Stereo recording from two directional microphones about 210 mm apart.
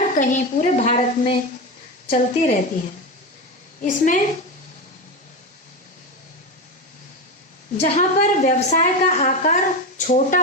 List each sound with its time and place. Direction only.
0.0 s a woman's voice: 35° left (ahead or behind)
3.8 s a woman's voice: 40° left (ahead or behind)
7.8 s a woman's voice: 35° left (ahead or behind)